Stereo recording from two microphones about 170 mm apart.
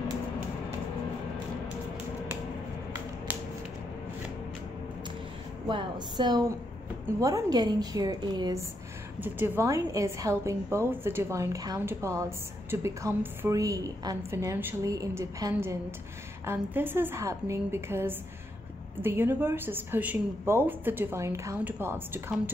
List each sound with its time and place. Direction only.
5.7 s a woman's voice: 25° right (ahead or behind)
9.2 s a woman's voice: 15° right (ahead or behind)